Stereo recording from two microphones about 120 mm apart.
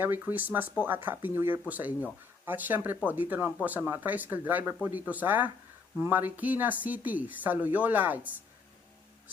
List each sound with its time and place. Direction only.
0.0 s speech: 15° right (ahead or behind)